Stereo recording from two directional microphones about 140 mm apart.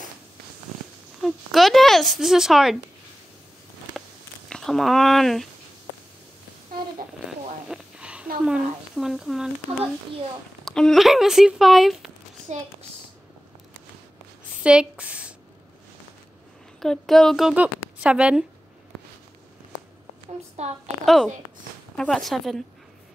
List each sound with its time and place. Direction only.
1.2 s speech: centre (ahead or behind)
4.5 s speech: centre (ahead or behind)
7.2 s a sound: 5° right (ahead or behind)
8.5 s speech: centre (ahead or behind)
10.6 s speech: 5° left (ahead or behind)
14.5 s a sound: 5° right (ahead or behind)
16.8 s speech: 5° left (ahead or behind)
20.5 s a woman's voice: 50° right (ahead or behind)
21.0 s speech: centre (ahead or behind)